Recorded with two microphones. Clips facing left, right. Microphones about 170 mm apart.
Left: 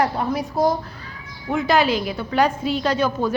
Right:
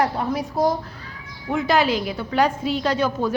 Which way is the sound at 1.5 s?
65° left (ahead or behind).